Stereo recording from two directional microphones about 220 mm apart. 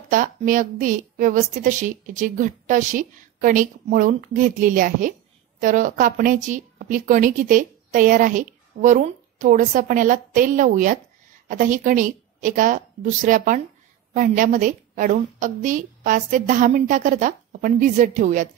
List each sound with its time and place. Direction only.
0.1 s a woman's voice: 35° right (ahead or behind)